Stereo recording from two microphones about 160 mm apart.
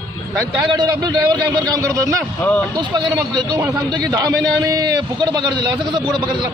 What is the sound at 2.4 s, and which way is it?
Speech, 10° left (ahead or behind).